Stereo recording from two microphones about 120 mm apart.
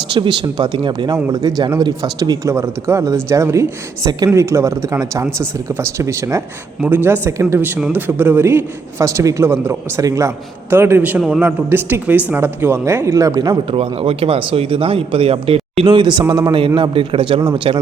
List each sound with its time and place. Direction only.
0.1 s a man's voice: 40° right (ahead or behind); by 7.7 s 20° right (ahead or behind)
7.8 s a man's voice: 10° right (ahead or behind); by 13.6 s 30° right (ahead or behind)
13.7 s speech: 50° right (ahead or behind)